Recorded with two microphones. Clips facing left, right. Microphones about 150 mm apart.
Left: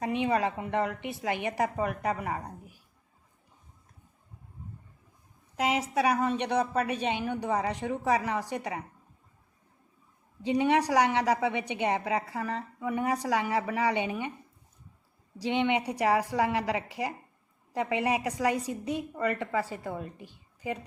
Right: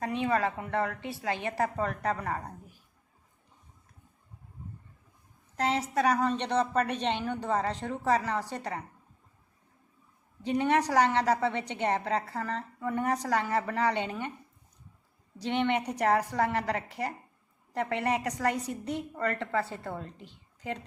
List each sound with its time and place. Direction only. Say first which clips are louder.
0.0 s a woman's voice: left 1 dB; 15° left (ahead or behind)
5.5 s a woman's voice: left 1 dB; 10° left (ahead or behind)
10.4 s a woman's voice: left 1 dB; 15° left (ahead or behind)
15.4 s a woman's voice: left 1 dB; 10° left (ahead or behind)